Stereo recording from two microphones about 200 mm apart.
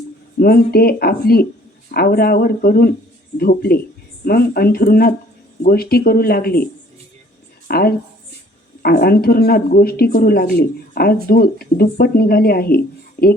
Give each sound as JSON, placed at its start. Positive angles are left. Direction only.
{"t": 0.3, "sound": "speech", "side_deg": 50}
{"t": 7.7, "sound": "speech", "side_deg": 50}